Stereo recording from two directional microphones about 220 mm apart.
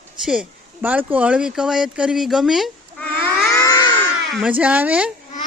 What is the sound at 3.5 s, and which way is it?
Baby cry, 15° left (ahead or behind).